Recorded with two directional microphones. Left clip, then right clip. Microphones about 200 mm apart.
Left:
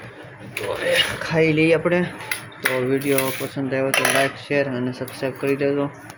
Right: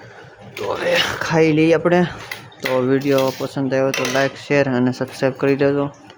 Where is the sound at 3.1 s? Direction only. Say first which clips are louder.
Right 5 dB; 25° right (ahead or behind).